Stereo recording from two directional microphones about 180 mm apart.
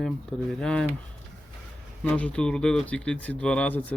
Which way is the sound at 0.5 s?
5° left (ahead or behind).